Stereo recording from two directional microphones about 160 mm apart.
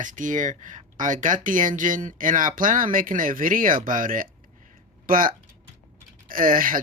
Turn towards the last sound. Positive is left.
turn(degrees=-60)  # may be behind; listen again after turning